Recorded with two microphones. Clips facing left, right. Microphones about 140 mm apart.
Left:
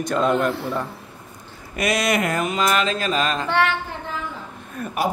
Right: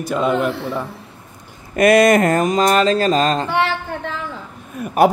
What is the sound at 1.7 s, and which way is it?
Speech, 50° right (ahead or behind).